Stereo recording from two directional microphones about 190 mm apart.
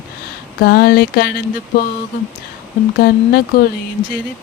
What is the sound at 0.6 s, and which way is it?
Speech, 55° left (ahead or behind).